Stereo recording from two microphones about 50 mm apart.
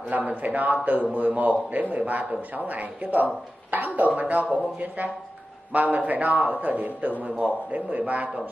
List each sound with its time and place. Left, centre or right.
0.1 s a man's voice: right